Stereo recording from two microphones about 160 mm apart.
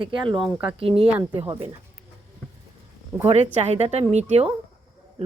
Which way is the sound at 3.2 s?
45° right (ahead or behind).